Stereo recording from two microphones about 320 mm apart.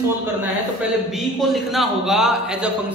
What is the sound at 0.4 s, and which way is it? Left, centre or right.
A man's voice, centre.